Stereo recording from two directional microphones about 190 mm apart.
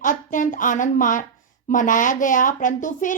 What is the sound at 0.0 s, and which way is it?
A woman's voice, 45° left (ahead or behind).